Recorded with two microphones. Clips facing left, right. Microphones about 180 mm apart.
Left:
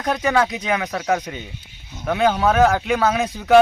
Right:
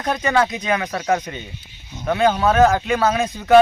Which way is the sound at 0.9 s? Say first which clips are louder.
Right 1 dB; centre (ahead or behind).